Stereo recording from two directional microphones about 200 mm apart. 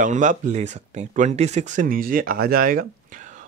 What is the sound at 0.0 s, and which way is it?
Speech, 40° right (ahead or behind).